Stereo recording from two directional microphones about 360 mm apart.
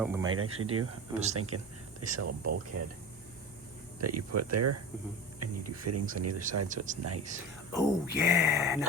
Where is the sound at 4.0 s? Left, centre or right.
Right.